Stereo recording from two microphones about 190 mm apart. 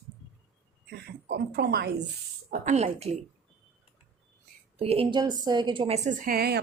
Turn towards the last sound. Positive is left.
turn(degrees=-55)  # may be behind; listen again after turning